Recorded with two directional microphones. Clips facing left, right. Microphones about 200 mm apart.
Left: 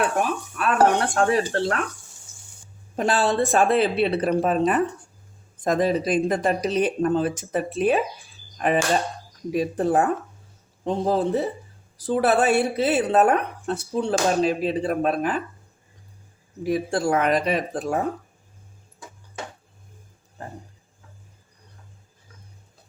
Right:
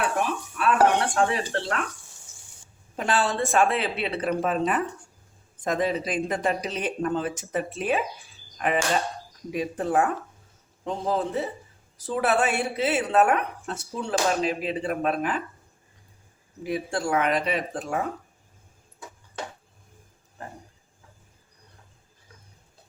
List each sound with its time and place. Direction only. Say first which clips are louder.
0.6 s speech: left 1 dB; 45° left (ahead or behind)
2.9 s a woman's voice: left 4 dB; 40° left (ahead or behind)
16.6 s a woman's voice: left 5 dB; 40° left (ahead or behind)